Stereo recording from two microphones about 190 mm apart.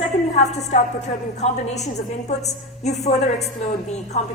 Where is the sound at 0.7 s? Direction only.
35° left (ahead or behind).